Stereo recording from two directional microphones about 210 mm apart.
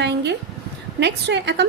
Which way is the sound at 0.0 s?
55° right (ahead or behind).